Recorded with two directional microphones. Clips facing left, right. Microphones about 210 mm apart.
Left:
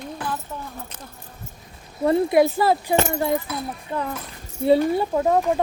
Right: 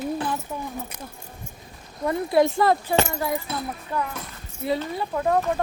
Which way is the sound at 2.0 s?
5° left (ahead or behind).